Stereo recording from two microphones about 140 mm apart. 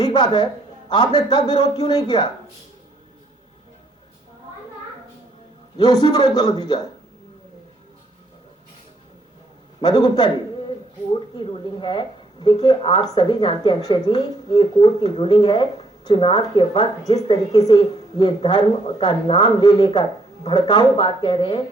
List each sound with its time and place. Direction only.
0.0 s a man's voice: 30° left (ahead or behind)
5.7 s speech: 30° left (ahead or behind)
9.8 s speech: 30° left (ahead or behind)
11.3 s speech: 35° left (ahead or behind)